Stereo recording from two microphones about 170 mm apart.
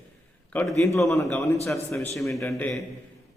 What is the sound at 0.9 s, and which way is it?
A man's voice, 15° left (ahead or behind).